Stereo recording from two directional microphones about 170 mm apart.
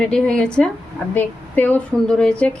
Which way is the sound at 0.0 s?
5° left (ahead or behind).